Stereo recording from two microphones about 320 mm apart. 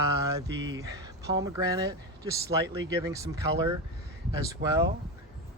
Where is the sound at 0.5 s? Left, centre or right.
Right.